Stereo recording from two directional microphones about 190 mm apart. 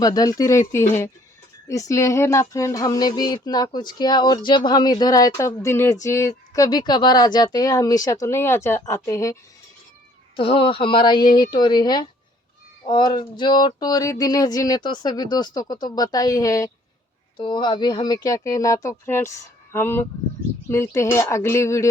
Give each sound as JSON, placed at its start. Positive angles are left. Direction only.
{"t": 0.0, "sound": "speech", "side_deg": 20}
{"t": 10.3, "sound": "speech", "side_deg": 30}